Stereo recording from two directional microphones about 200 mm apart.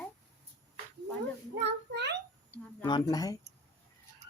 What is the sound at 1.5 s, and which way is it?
Speech, 60° right (ahead or behind).